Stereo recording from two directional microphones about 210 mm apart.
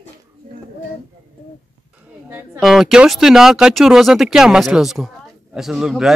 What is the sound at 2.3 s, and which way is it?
A man's voice, 5° right (ahead or behind).